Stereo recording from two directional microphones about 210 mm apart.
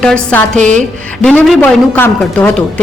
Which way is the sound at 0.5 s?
35° right (ahead or behind).